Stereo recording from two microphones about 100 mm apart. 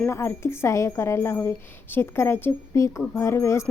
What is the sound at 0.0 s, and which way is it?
A woman's voice, 25° left (ahead or behind).